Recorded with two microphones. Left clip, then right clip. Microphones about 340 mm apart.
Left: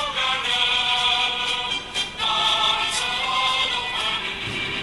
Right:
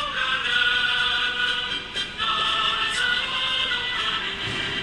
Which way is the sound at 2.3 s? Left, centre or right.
Centre.